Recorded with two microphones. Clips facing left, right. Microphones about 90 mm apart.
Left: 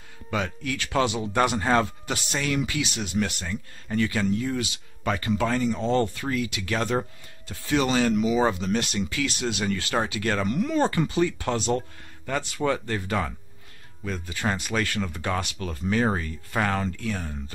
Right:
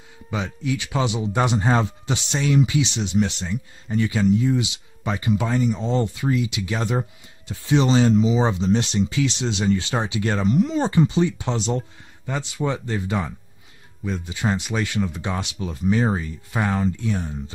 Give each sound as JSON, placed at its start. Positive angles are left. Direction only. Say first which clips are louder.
{"t": 0.3, "sound": "speech", "louder": "right 2 dB", "side_deg": -15}